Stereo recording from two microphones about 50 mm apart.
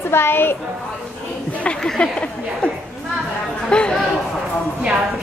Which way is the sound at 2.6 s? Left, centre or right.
Left.